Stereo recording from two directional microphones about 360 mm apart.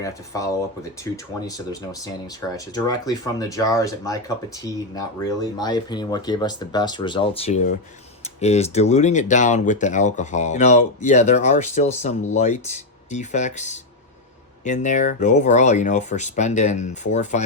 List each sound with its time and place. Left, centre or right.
0.0 s speech: centre